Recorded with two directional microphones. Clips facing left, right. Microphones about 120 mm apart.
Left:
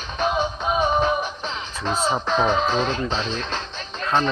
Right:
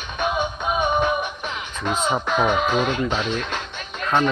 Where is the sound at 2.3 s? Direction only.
30° left (ahead or behind).